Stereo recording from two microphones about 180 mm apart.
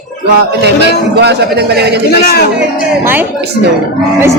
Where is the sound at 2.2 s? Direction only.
60° left (ahead or behind).